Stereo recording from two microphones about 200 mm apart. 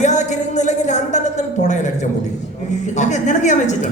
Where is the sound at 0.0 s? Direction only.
35° left (ahead or behind).